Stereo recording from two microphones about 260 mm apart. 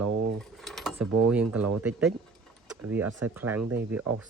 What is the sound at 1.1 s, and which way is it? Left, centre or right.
Mechanisms, right.